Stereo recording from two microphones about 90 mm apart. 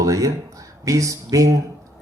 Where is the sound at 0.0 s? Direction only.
40° right (ahead or behind).